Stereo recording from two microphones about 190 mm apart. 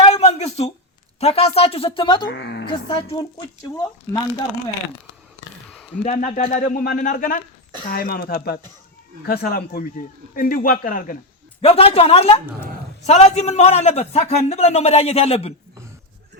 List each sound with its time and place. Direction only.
0.0 s a sound: 35° left (ahead or behind)
1.2 s a man's voice: 35° left (ahead or behind)
2.2 s speech: 65° left (ahead or behind)
2.9 s speech: 30° left (ahead or behind)
5.6 s a sound: centre (ahead or behind)
6.0 s speech: 40° left (ahead or behind)
11.6 s a man's voice: 30° left (ahead or behind)